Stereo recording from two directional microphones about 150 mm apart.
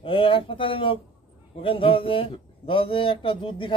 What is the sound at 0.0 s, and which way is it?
A man's voice, 35° left (ahead or behind).